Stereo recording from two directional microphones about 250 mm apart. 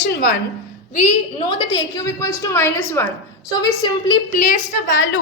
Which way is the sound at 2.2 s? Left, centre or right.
Centre.